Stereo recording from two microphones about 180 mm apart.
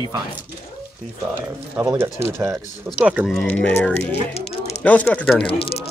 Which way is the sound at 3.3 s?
10° left (ahead or behind).